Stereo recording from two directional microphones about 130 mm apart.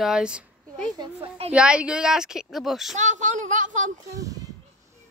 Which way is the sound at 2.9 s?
65° right (ahead or behind).